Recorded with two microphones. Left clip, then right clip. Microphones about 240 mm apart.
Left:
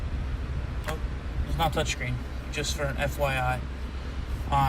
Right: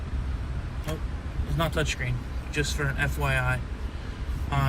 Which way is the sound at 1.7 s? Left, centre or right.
Centre.